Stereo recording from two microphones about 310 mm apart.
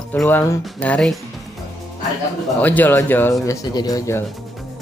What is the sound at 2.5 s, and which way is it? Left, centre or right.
Speech, centre.